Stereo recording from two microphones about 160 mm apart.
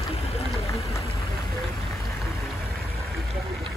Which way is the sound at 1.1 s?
20° left (ahead or behind).